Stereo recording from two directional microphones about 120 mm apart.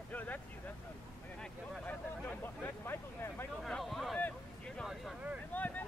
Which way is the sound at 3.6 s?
Centre (ahead or behind).